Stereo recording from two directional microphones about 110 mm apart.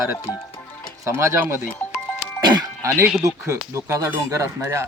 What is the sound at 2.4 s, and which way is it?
Music, 40° right (ahead or behind).